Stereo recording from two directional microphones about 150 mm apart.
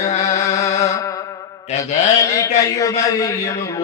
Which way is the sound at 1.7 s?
50° left (ahead or behind).